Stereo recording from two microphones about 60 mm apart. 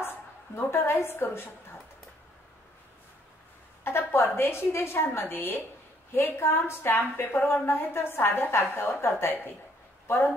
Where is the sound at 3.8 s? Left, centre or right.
Left.